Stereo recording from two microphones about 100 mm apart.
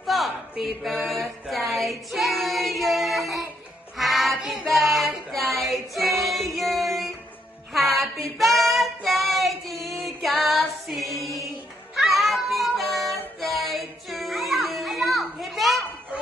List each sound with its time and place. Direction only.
0.0 s a sound: centre (ahead or behind)
3.9 s child singing: centre (ahead or behind)
5.9 s female singing: centre (ahead or behind)
6.5 s music: centre (ahead or behind)
7.7 s child singing: centre (ahead or behind)
10.6 s music: centre (ahead or behind)